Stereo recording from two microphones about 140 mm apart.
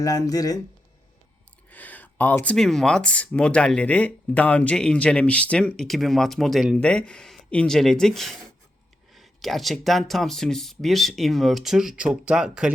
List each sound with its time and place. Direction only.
0.0 s speech: 25° left (ahead or behind)
1.7 s speech: 10° left (ahead or behind); by 12.7 s 5° right (ahead or behind)